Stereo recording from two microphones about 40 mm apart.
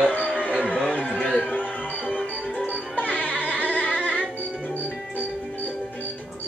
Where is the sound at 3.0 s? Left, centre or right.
Left.